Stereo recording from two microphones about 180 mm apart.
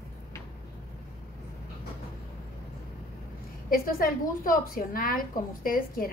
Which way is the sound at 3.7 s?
55° left (ahead or behind).